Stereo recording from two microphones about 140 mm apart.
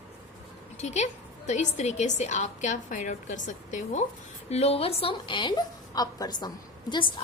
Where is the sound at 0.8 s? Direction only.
55° left (ahead or behind).